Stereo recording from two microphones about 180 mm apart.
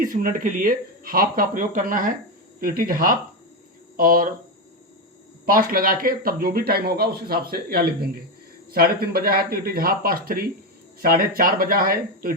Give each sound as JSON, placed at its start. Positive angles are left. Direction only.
{"t": 0.0, "sound": "speech", "side_deg": -50}
{"t": 5.5, "sound": "speech", "side_deg": -55}